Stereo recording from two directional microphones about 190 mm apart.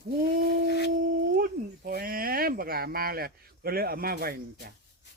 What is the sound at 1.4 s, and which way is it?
Speech, 50° right (ahead or behind).